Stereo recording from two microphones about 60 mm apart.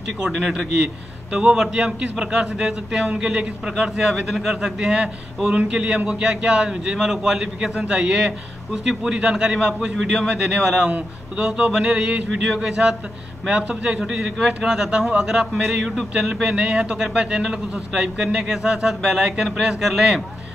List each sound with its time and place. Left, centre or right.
0.2 s a man's voice: centre